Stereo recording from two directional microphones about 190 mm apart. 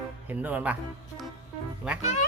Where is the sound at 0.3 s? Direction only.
10° right (ahead or behind).